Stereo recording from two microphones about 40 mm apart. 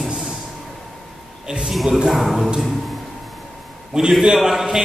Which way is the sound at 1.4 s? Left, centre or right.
Centre.